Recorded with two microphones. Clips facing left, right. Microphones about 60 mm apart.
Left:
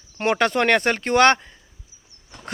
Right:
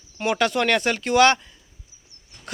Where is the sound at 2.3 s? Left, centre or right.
Left.